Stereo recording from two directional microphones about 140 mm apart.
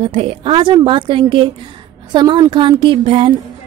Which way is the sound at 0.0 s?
40° right (ahead or behind).